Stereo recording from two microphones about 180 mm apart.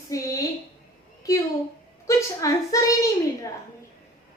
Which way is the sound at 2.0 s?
20° left (ahead or behind).